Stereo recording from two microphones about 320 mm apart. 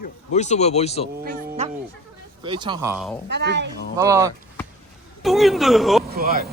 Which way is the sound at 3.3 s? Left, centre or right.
Right.